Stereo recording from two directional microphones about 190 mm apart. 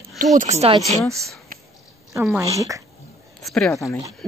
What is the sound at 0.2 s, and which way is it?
Speech, 40° right (ahead or behind).